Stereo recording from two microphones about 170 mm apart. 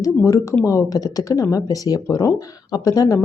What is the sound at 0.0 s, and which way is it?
Speech, 20° left (ahead or behind).